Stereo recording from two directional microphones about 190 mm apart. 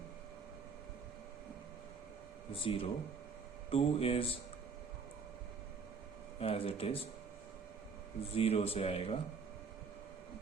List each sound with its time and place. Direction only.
2.5 s speech: 30° left (ahead or behind)
6.4 s speech: 30° left (ahead or behind)
8.4 s speech: 30° left (ahead or behind)